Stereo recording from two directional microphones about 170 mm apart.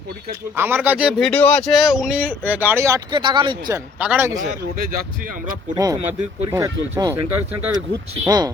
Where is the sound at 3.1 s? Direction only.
30° right (ahead or behind).